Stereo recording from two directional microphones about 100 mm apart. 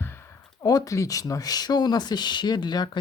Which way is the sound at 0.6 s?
40° left (ahead or behind).